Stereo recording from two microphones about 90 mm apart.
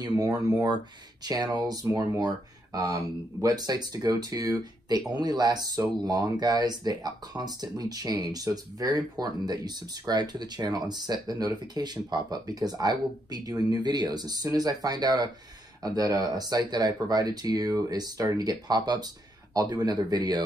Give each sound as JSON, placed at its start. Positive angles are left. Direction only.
{"t": 0.2, "sound": "speech", "side_deg": -45}